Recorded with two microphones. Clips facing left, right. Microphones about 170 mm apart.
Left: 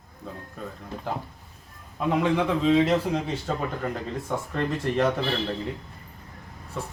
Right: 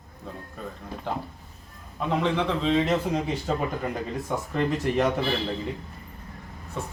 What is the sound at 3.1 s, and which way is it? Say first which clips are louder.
Speech: right 1 dB; 10° right (ahead or behind).